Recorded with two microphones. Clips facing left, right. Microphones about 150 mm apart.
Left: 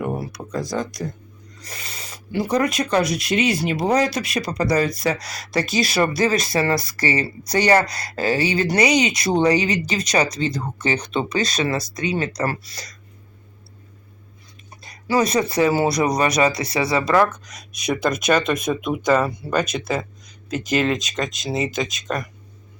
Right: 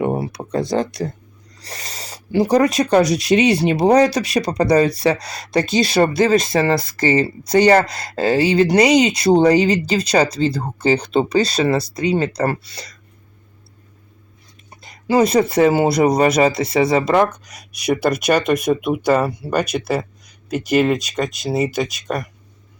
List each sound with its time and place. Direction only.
0.0 s a sound: 30° right (ahead or behind)
0.3 s speech: 65° right (ahead or behind)
1.0 s speech: 40° right (ahead or behind)
14.8 s speech: 25° right (ahead or behind); by 22.3 s 10° right (ahead or behind)